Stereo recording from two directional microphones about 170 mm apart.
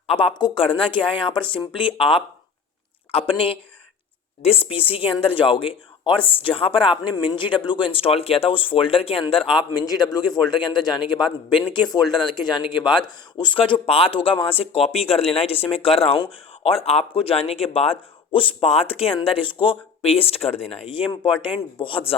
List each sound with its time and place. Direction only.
0.1 s speech: 30° left (ahead or behind)